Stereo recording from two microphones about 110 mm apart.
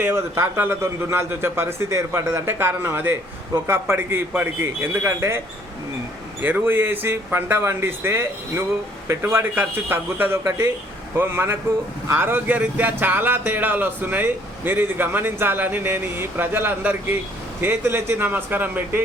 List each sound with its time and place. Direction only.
0.0 s speech: 20° right (ahead or behind)
6.4 s speech: 15° right (ahead or behind)